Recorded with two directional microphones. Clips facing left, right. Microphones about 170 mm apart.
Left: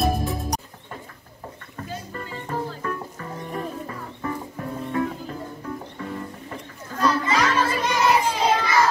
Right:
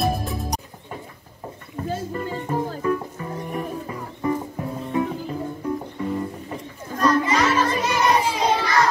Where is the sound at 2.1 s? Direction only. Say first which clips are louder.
Right 2 dB; 15° right (ahead or behind).